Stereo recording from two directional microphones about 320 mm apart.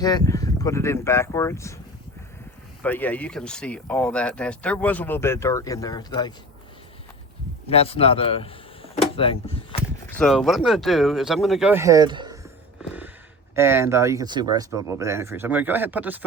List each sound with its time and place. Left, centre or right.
0.0 s speech: centre
2.8 s speech: centre
7.7 s speech: centre
10.1 s speech: centre
13.6 s speech: centre